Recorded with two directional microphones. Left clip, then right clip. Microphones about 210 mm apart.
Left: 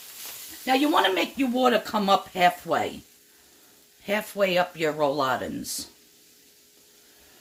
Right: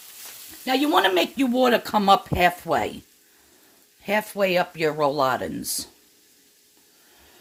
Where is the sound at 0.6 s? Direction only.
45° right (ahead or behind); by 2.9 s 30° right (ahead or behind).